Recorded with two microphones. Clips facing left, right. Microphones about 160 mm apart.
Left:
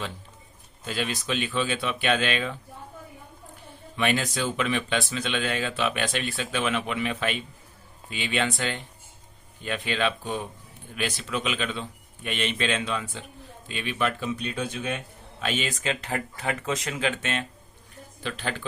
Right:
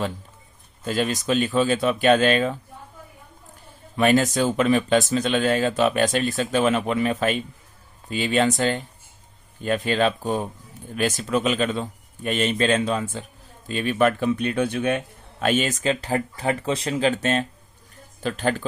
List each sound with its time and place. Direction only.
0.9 s a man's voice: 40° right (ahead or behind)
3.9 s a man's voice: 40° right (ahead or behind)